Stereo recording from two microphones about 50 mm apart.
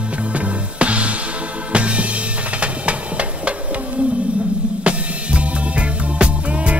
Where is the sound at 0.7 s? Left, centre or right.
Right.